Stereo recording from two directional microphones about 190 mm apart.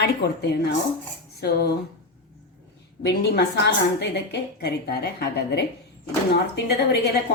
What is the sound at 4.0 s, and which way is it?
A woman's voice, 60° left (ahead or behind).